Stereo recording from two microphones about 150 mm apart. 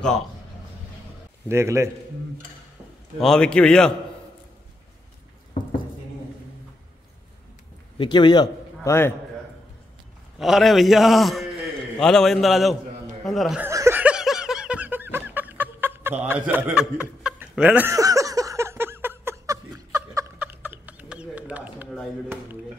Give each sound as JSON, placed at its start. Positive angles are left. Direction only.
{"t": 1.5, "sound": "a man's voice", "side_deg": -20}
{"t": 3.2, "sound": "a man's voice", "side_deg": 5}
{"t": 8.0, "sound": "a man's voice", "side_deg": 30}
{"t": 10.4, "sound": "a man's voice", "side_deg": 0}
{"t": 13.6, "sound": "snicker", "side_deg": -20}
{"t": 17.9, "sound": "a sound", "side_deg": -20}